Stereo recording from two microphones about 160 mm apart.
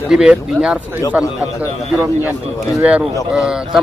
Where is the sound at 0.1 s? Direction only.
5° right (ahead or behind).